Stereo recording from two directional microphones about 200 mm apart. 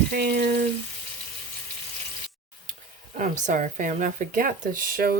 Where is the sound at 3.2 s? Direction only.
40° right (ahead or behind).